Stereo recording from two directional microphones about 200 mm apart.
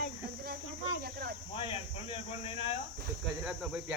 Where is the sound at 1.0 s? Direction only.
50° right (ahead or behind).